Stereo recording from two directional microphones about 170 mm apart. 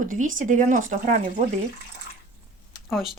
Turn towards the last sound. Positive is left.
turn(degrees=0)  # may be behind; listen again after turning